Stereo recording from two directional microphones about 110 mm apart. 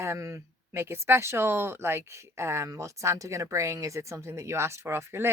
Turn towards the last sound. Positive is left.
turn(degrees=-25)  # may be behind; listen again after turning